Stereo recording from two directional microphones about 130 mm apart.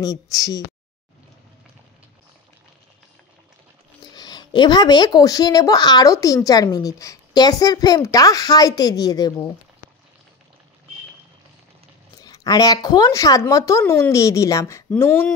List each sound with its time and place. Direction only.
0.0 s speech: 25° left (ahead or behind)
4.1 s speech: 30° left (ahead or behind)
12.2 s speech: 30° left (ahead or behind)